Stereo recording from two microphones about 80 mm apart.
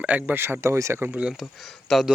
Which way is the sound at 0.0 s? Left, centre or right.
Centre.